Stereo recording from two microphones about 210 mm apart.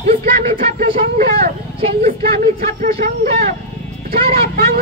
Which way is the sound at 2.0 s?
40° right (ahead or behind).